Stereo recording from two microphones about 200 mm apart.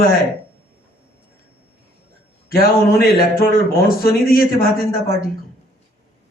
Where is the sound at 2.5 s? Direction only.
50° left (ahead or behind).